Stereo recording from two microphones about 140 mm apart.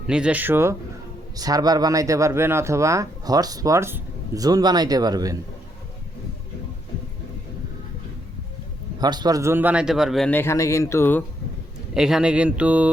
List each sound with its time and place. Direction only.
0.1 s a man's voice: 10° right (ahead or behind)
4.4 s speech: 30° right (ahead or behind)
9.0 s a man's voice: 30° right (ahead or behind); by 10.2 s centre (ahead or behind)
10.2 s speech: 15° left (ahead or behind)
11.9 s a man's voice: 5° right (ahead or behind)